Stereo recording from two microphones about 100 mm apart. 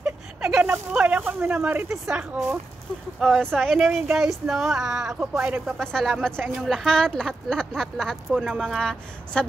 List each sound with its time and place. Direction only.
0.0 s a sound: 10° right (ahead or behind)
0.9 s speech: 15° right (ahead or behind)
3.2 s speech: 5° left (ahead or behind)
5.8 s speech: 5° left (ahead or behind)